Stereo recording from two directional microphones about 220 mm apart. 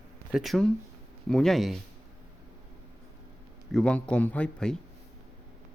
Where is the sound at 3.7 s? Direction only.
5° left (ahead or behind).